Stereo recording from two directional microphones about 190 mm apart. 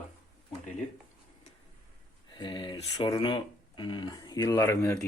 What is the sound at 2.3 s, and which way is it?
Speech, 25° left (ahead or behind).